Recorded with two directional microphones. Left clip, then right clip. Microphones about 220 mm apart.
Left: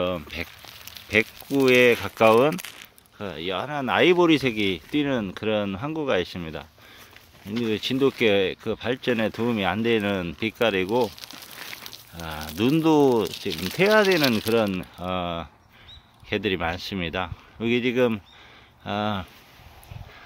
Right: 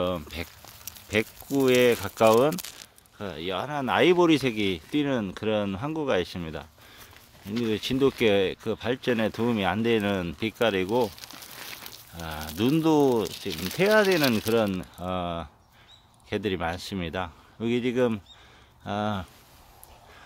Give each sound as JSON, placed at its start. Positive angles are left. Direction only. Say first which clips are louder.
{"t": 0.0, "sound": "speech", "louder": "left 2 dB", "side_deg": -5}
{"t": 11.1, "sound": "a sound", "louder": "left 2 dB", "side_deg": 25}
{"t": 11.5, "sound": "walk", "louder": "left 3 dB", "side_deg": 5}
{"t": 12.2, "sound": "speech", "louder": "left 2 dB", "side_deg": 5}